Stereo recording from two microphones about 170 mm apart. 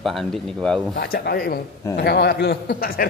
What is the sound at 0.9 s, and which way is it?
Speech, 60° left (ahead or behind).